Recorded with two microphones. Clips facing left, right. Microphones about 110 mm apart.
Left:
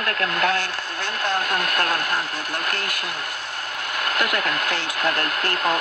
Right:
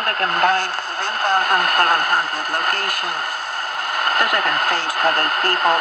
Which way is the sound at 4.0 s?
40° right (ahead or behind).